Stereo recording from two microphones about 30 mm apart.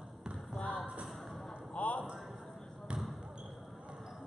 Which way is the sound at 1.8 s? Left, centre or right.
Left.